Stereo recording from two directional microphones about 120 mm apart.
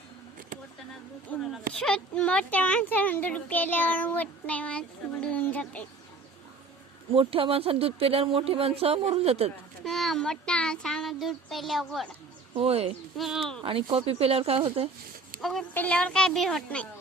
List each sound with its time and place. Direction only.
1.3 s a sound: 15° left (ahead or behind)
1.8 s speech: 10° left (ahead or behind)
7.1 s speech: 50° right (ahead or behind)
9.8 s child singing: centre (ahead or behind)
12.5 s a woman's voice: 55° right (ahead or behind)
13.1 s child singing: centre (ahead or behind)
13.6 s speech: 45° right (ahead or behind)
15.4 s speech: centre (ahead or behind)
15.7 s speech: 10° left (ahead or behind)